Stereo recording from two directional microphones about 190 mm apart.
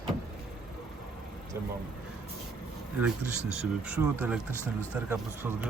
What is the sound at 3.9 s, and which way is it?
Speech, 10° right (ahead or behind).